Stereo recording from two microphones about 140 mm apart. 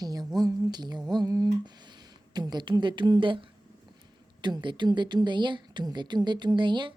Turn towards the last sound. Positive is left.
turn(degrees=-35)  # may be behind; listen again after turning